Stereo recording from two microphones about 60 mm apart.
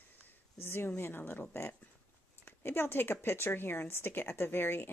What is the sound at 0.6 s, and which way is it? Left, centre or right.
Speech, left.